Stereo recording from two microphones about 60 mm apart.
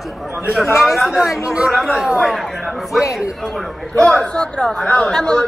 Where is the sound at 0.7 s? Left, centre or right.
Centre.